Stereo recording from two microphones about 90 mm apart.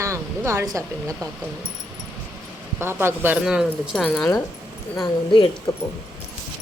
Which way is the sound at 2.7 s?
25° right (ahead or behind).